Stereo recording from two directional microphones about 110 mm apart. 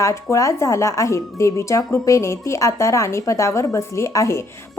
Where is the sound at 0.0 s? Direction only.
25° left (ahead or behind).